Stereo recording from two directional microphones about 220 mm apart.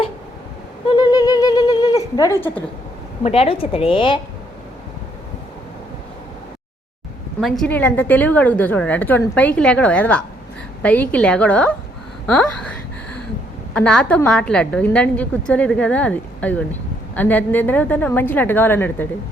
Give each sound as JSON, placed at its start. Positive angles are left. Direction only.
{"t": 0.9, "sound": "bird", "side_deg": 20}
{"t": 2.1, "sound": "a woman's voice", "side_deg": 15}
{"t": 3.2, "sound": "a woman's voice", "side_deg": 25}
{"t": 7.4, "sound": "a woman's voice", "side_deg": 0}
{"t": 13.7, "sound": "a woman's voice", "side_deg": 5}